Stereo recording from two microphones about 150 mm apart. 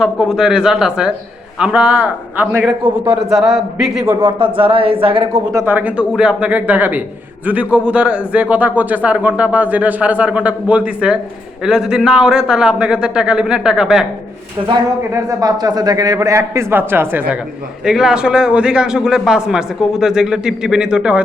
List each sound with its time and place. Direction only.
0.0 s a man's voice: 5° right (ahead or behind)
3.2 s a man's voice: centre (ahead or behind)
4.2 s speech: 35° right (ahead or behind)
5.5 s a man's voice: 10° right (ahead or behind)
15.1 s a man's voice: 25° right (ahead or behind)
17.8 s a man's voice: 5° right (ahead or behind)